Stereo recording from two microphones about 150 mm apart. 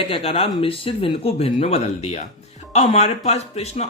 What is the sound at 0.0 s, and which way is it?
Speech, 40° left (ahead or behind).